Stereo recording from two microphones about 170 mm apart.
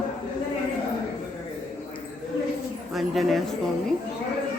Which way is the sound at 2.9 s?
Centre (ahead or behind).